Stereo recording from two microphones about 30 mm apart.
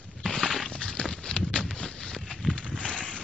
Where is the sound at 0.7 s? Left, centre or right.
Left.